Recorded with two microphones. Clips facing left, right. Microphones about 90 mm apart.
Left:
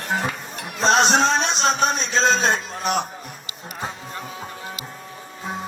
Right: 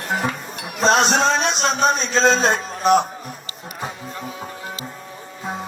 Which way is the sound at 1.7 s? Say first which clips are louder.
Right 2 dB; 40° right (ahead or behind).